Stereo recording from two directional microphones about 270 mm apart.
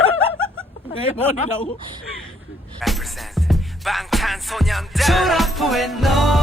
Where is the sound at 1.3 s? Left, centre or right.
Left.